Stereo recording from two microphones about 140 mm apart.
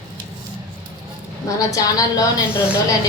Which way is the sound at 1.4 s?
25° left (ahead or behind).